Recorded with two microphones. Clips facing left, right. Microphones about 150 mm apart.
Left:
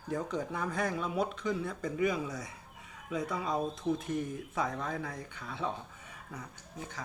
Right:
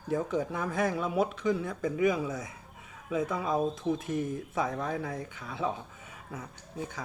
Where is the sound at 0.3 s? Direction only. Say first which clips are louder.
Right 4 dB; 5° right (ahead or behind).